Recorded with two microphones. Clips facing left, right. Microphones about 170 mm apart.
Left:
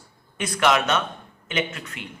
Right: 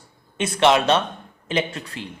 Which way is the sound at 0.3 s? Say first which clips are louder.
Right 4 dB; 25° right (ahead or behind).